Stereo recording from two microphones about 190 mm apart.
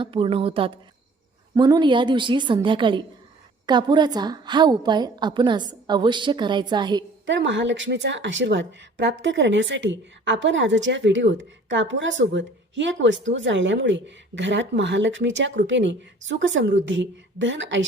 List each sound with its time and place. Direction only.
0.0 s a woman's voice: 30° right (ahead or behind)
7.3 s speech: 70° right (ahead or behind)